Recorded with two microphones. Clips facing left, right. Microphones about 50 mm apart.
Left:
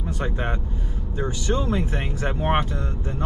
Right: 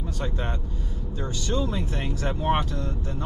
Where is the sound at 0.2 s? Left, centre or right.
Left.